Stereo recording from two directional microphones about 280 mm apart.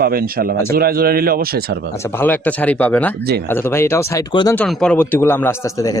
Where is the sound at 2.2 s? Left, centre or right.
Centre.